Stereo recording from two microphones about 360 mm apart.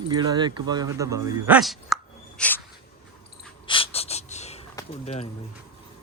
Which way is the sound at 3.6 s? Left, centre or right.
Centre.